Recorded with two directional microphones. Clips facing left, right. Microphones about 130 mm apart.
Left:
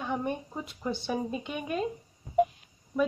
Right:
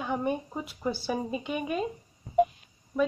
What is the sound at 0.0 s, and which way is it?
Speech, 5° right (ahead or behind).